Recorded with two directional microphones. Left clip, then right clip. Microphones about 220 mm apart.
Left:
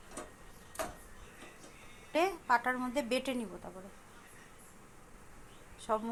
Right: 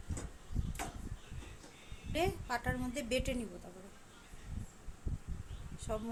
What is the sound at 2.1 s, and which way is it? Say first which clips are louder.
A woman's voice: left 6 dB; 5° left (ahead or behind).